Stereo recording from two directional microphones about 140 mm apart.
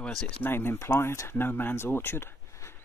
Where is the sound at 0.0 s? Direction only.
15° left (ahead or behind).